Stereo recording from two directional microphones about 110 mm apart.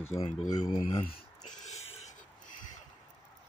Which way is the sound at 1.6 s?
90° left.